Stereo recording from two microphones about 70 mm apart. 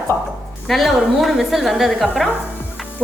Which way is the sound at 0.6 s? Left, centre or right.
Centre.